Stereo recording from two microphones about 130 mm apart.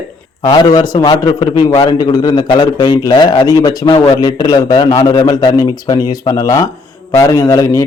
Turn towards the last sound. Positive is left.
turn(degrees=25)  # may be behind; listen again after turning